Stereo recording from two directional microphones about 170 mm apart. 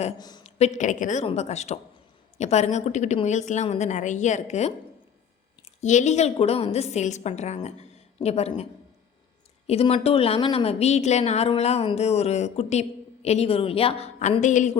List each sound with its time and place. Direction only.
0.2 s speech: 25° left (ahead or behind)
0.4 s a woman's voice: 45° left (ahead or behind)
5.8 s a woman's voice: 45° left (ahead or behind)
9.6 s a woman's voice: 35° left (ahead or behind)